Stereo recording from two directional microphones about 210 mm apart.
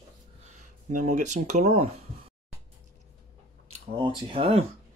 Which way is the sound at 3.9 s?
25° right (ahead or behind).